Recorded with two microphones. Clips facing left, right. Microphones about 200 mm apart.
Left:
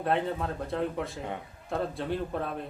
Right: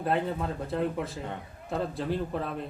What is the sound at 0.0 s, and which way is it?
A man's voice, centre (ahead or behind).